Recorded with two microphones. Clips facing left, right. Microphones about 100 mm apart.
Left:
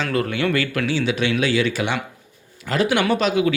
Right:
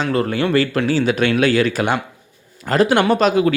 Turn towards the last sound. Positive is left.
turn(degrees=-45)  # may be behind; listen again after turning